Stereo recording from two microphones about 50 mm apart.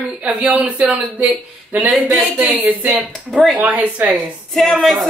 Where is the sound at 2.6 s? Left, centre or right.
Right.